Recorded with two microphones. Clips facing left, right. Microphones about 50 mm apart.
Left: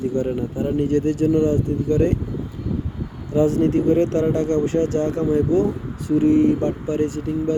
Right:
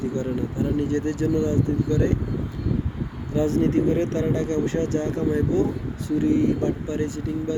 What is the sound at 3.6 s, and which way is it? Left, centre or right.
Speech, left.